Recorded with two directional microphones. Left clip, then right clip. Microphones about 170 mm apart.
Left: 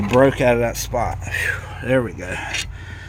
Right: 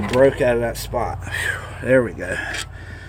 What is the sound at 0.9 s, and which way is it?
Speech, 40° left (ahead or behind).